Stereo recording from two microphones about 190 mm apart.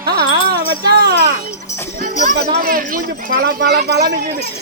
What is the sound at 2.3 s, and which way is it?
A man's voice, 55° right (ahead or behind).